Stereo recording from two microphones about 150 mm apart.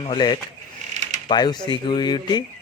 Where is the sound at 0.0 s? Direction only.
30° left (ahead or behind).